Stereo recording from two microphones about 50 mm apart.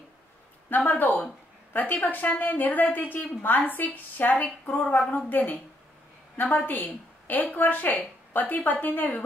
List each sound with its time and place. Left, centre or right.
0.7 s a woman's voice: left
6.3 s a woman's voice: left